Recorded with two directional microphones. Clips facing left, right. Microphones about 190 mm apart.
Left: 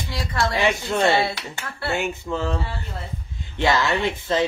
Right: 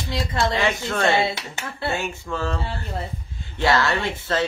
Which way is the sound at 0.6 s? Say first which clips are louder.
Left 2 dB; 15° left (ahead or behind).